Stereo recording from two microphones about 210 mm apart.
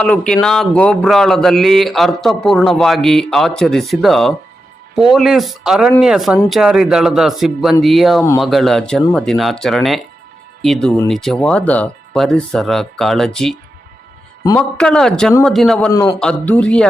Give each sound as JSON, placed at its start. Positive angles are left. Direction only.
{"t": 0.0, "sound": "speech", "side_deg": 5}
{"t": 14.6, "sound": "speech", "side_deg": 5}
{"t": 15.9, "sound": "a man's voice", "side_deg": 15}
{"t": 16.2, "sound": "speech", "side_deg": 5}